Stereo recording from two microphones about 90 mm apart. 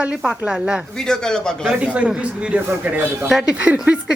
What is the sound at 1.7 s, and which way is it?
A woman's voice, 15° right (ahead or behind).